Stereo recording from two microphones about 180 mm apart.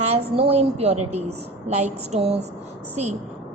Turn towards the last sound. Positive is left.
turn(degrees=-40)  # may be behind; listen again after turning